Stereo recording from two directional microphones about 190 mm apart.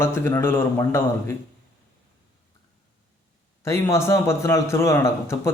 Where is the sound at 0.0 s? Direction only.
15° left (ahead or behind).